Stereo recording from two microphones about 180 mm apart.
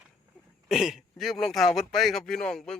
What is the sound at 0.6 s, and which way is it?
Speech, centre (ahead or behind).